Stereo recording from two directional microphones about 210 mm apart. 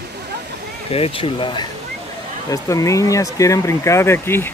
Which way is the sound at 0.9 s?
25° left (ahead or behind).